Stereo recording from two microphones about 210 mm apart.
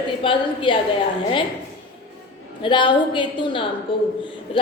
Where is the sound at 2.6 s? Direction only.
20° left (ahead or behind).